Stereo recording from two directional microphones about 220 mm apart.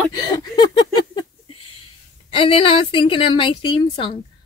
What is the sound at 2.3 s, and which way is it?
Female singing, 25° left (ahead or behind).